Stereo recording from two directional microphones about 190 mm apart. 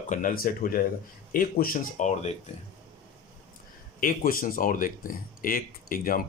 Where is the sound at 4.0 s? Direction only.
45° left (ahead or behind).